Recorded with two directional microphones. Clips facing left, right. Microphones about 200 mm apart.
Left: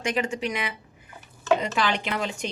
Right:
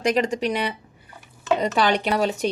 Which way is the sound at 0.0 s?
35° right (ahead or behind).